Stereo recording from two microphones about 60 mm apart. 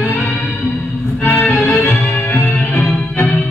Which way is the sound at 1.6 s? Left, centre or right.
Left.